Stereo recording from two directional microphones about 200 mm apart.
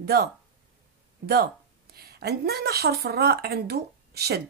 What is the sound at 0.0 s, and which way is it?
A woman's voice, 50° right (ahead or behind).